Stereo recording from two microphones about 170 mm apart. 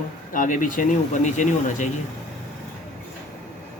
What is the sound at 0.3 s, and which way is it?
Speech, 50° left (ahead or behind).